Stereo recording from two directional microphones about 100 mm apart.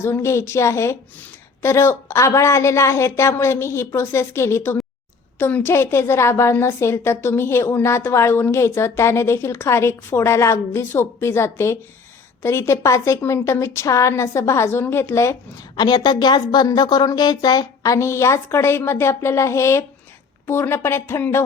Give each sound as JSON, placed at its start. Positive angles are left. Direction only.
{"t": 0.0, "sound": "a woman's voice", "side_deg": 25}
{"t": 15.7, "sound": "a woman's voice", "side_deg": 45}